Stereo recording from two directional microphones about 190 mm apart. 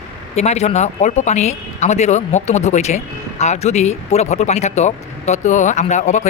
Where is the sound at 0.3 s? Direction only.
35° left (ahead or behind).